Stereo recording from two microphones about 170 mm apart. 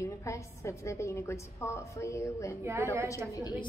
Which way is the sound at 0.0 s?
15° left (ahead or behind).